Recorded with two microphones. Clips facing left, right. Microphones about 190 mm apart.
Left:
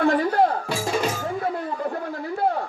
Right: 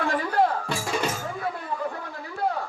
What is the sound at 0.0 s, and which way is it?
Music, 35° left (ahead or behind).